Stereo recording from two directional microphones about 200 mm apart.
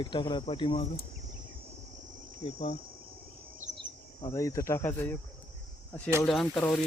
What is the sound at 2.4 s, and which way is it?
Insect, 30° left (ahead or behind).